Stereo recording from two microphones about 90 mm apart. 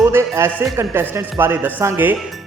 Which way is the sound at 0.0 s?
30° right (ahead or behind).